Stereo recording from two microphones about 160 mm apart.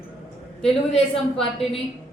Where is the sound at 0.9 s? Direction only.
35° left (ahead or behind).